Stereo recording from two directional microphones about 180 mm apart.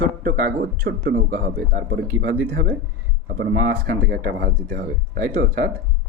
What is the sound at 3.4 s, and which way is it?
Speech, 55° right (ahead or behind).